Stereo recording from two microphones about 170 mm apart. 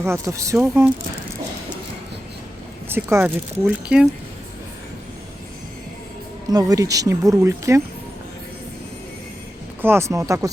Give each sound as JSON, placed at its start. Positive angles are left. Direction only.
{"t": 0.0, "sound": "speech", "side_deg": -15}
{"t": 2.9, "sound": "speech", "side_deg": -15}
{"t": 6.5, "sound": "speech", "side_deg": -20}
{"t": 9.8, "sound": "speech", "side_deg": -15}